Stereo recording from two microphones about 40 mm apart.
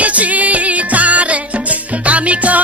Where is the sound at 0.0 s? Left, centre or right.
Right.